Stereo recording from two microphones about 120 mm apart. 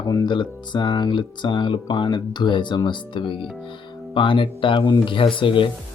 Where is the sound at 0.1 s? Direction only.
35° left (ahead or behind).